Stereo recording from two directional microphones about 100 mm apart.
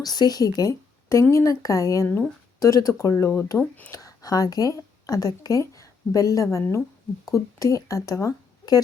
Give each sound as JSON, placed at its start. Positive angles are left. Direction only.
{"t": 0.0, "sound": "speech", "side_deg": 40}
{"t": 3.6, "sound": "speech", "side_deg": 15}
{"t": 3.9, "sound": "a woman's voice", "side_deg": 35}